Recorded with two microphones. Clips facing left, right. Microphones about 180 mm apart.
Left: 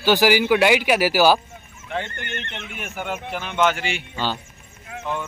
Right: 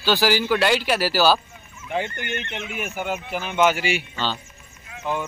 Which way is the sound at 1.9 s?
10° right (ahead or behind).